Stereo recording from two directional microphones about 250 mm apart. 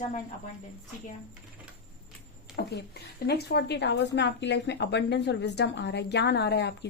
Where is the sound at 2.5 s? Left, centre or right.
Left.